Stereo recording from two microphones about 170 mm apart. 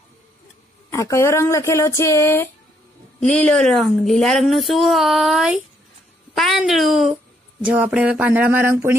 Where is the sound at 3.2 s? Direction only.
5° left (ahead or behind).